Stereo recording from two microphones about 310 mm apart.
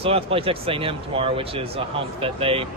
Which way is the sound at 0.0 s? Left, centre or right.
Centre.